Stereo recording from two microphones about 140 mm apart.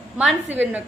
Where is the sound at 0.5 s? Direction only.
10° right (ahead or behind).